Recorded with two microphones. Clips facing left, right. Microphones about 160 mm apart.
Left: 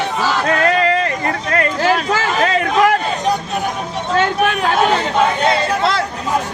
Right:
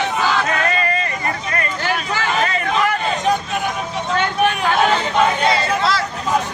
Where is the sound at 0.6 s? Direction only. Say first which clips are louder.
Left 6 dB; 70° left (ahead or behind).